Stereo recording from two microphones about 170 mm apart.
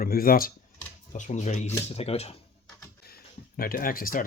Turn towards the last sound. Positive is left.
turn(degrees=55)  # may be behind; listen again after turning